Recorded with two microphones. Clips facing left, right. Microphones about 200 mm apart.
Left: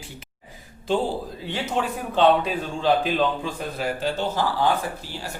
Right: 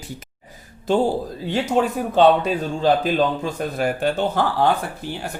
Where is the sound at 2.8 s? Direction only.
40° right (ahead or behind).